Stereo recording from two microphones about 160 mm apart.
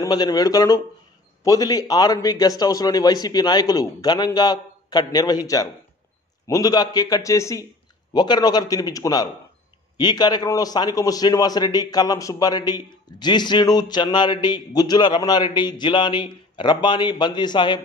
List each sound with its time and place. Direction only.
0.0 s a man's voice: 25° left (ahead or behind)